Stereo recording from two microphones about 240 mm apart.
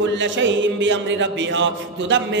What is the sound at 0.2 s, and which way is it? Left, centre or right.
Mantra, right.